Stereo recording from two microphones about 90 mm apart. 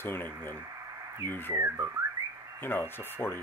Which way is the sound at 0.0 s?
25° left (ahead or behind).